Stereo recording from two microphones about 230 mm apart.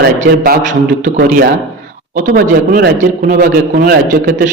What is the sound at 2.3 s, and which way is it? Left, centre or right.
A man's voice, right.